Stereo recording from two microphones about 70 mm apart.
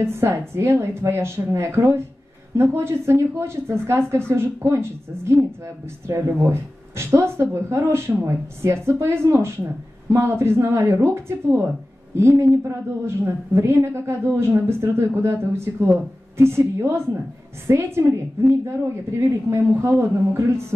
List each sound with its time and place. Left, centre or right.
0.0 s a woman's voice: right